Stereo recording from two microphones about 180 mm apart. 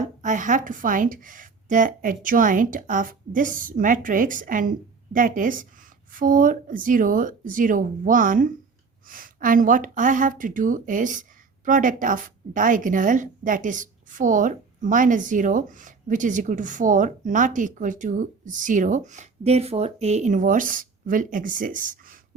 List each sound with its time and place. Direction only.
0.0 s speech: 45° right (ahead or behind)